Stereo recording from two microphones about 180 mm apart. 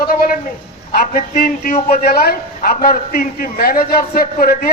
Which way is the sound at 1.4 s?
55° left (ahead or behind).